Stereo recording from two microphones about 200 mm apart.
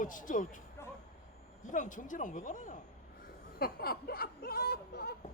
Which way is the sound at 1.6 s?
40° left (ahead or behind).